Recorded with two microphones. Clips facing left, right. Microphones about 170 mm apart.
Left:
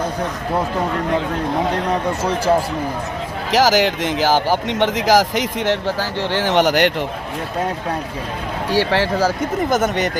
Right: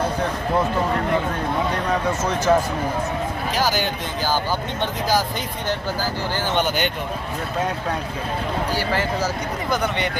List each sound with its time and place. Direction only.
2.2 s speech: 30° left (ahead or behind)
3.5 s speech: 90° left
8.7 s speech: 75° left (ahead or behind)
9.6 s speech: 45° left (ahead or behind)